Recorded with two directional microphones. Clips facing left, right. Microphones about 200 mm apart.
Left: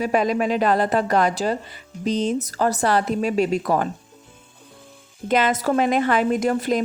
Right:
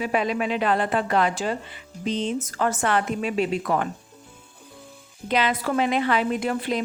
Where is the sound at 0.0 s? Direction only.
40° left (ahead or behind).